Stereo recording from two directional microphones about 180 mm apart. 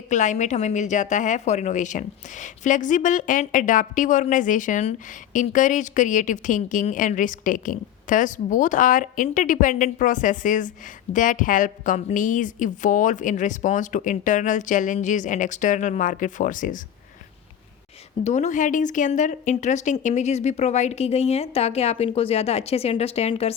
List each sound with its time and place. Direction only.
0.1 s a woman's voice: 40° left (ahead or behind)
18.2 s a woman's voice: 40° left (ahead or behind)